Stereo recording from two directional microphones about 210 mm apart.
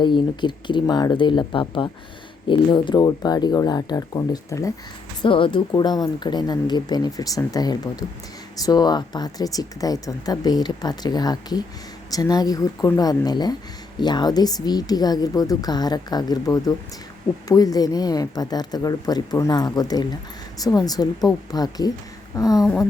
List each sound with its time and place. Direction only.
0.0 s a woman's voice: 20° left (ahead or behind)